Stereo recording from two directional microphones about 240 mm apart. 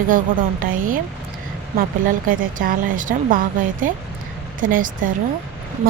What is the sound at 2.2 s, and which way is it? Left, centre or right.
A woman's voice, right.